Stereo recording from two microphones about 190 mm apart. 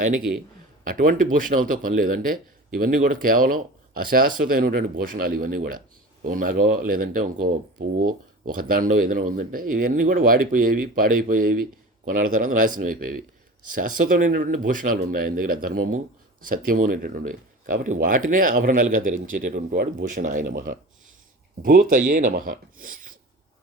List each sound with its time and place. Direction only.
0.9 s speech: 45° right (ahead or behind)